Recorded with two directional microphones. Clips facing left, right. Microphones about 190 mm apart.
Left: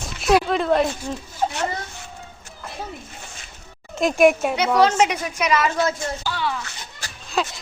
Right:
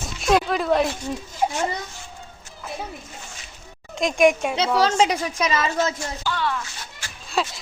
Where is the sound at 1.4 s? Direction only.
15° right (ahead or behind).